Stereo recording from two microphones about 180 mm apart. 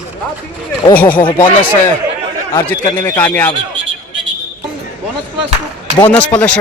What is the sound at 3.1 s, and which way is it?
Speech, 10° left (ahead or behind).